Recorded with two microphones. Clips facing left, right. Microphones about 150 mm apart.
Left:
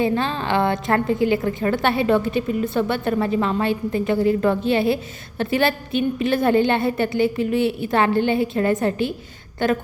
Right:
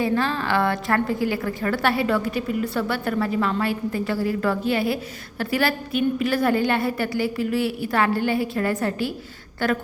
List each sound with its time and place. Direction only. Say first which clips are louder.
0.0 s a woman's voice: left 1 dB; 20° left (ahead or behind)